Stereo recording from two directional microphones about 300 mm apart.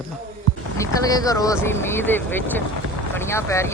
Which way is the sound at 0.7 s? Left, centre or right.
Centre.